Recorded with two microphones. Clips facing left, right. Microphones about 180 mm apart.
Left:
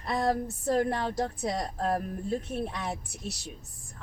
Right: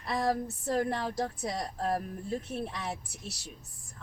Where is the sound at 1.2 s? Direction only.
40° left (ahead or behind).